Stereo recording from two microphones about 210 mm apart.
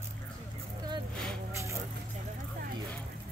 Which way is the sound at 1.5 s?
15° right (ahead or behind).